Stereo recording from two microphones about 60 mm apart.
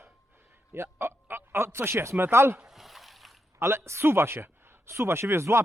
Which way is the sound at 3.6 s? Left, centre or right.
Right.